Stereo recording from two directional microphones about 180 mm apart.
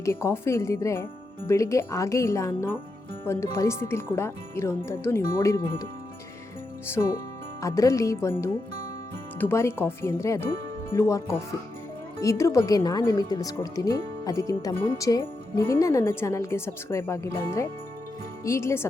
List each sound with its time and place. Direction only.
0.0 s speech: 15° left (ahead or behind)
7.6 s speech: 15° left (ahead or behind)